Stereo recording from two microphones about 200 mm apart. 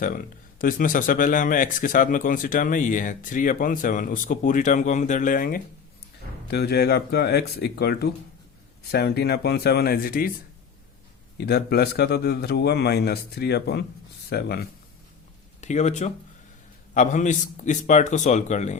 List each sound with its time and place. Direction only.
0.0 s speech: 45° left (ahead or behind)
6.5 s a man's voice: 55° left (ahead or behind)
11.3 s a man's voice: 55° left (ahead or behind)
15.6 s speech: 35° left (ahead or behind)